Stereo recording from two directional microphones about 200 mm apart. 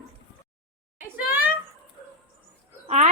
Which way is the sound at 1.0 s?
10° right (ahead or behind).